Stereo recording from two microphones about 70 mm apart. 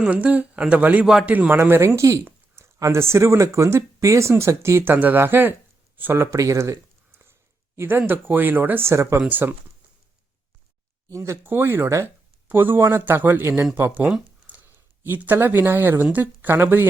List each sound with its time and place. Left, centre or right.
0.0 s speech: centre
2.0 s speech: right
4.9 s speech: right
6.3 s speech: right
7.8 s speech: right
9.3 s speech: right
11.1 s speech: right
11.4 s speech: right
12.5 s speech: right
14.4 s a sound: right
16.1 s speech: right